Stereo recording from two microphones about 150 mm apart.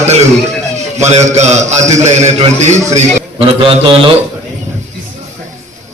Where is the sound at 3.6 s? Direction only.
35° right (ahead or behind).